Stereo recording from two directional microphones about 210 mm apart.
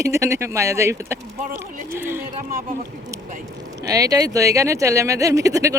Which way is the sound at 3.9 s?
15° right (ahead or behind).